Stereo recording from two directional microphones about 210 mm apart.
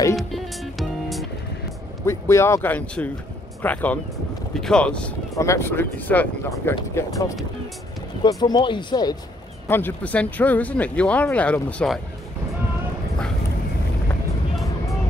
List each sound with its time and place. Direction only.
0.1 s music: centre (ahead or behind)
2.0 s speech: 15° left (ahead or behind)
9.7 s speech: 10° left (ahead or behind)